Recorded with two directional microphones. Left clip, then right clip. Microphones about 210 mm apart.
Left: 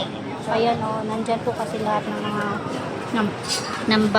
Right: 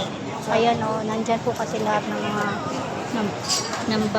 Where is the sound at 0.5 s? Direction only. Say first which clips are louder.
Right 1 dB; centre (ahead or behind).